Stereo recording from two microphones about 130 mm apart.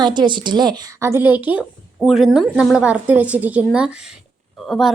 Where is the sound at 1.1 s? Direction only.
15° right (ahead or behind).